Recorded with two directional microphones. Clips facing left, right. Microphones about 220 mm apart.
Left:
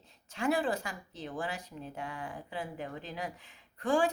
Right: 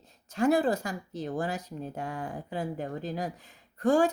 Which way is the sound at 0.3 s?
40° right (ahead or behind).